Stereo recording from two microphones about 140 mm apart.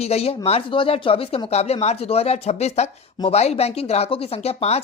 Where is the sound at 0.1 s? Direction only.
45° left (ahead or behind).